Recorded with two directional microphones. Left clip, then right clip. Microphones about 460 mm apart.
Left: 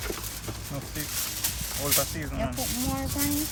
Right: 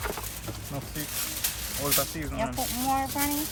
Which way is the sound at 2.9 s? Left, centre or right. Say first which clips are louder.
Right 5 dB; centre.